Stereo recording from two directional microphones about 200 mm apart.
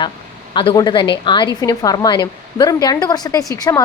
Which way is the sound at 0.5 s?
25° left (ahead or behind).